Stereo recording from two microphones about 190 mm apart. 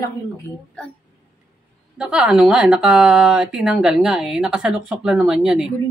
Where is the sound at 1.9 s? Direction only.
5° right (ahead or behind).